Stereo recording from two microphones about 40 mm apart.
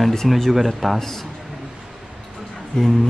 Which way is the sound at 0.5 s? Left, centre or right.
Centre.